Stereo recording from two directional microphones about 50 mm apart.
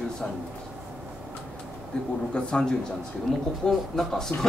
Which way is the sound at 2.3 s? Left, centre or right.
Centre.